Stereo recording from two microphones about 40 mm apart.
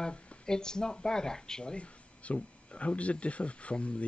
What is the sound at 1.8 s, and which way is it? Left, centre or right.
Speech, left.